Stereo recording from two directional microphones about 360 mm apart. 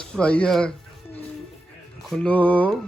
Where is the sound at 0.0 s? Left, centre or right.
Centre.